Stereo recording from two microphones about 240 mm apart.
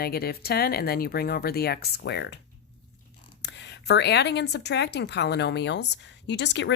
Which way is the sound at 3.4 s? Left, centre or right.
Left.